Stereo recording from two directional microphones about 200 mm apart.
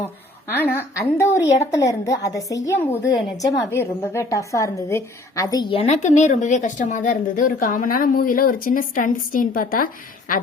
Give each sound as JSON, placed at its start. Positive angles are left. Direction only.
{"t": 0.5, "sound": "a woman's voice", "side_deg": 10}